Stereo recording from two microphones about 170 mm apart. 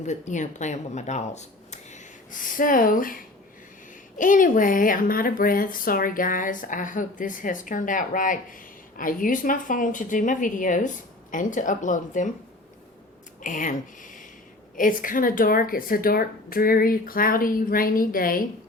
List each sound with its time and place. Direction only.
0.0 s speech: 45° left (ahead or behind)
4.2 s speech: 50° left (ahead or behind)
13.4 s a woman's voice: 50° left (ahead or behind)